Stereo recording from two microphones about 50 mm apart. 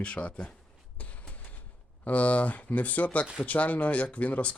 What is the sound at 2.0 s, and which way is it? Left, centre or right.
Speech, left.